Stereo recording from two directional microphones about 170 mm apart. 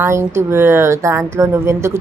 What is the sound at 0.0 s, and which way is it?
Speech, 15° right (ahead or behind).